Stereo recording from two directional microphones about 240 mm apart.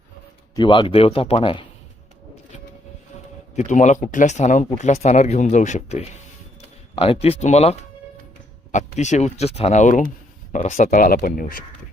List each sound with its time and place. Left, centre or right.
0.5 s speech: centre
3.5 s speech: left